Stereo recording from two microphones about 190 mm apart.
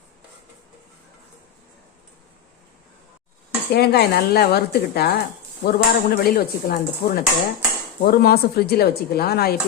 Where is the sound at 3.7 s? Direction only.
55° left (ahead or behind).